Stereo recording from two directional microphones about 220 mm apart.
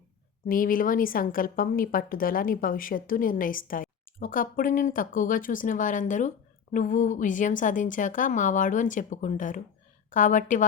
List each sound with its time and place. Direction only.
0.4 s a woman's voice: 40° left (ahead or behind)